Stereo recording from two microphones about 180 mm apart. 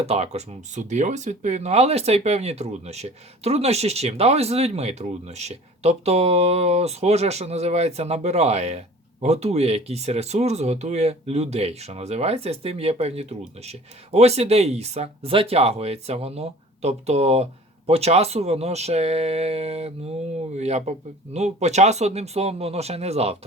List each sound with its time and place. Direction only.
0.0 s speech: 35° right (ahead or behind)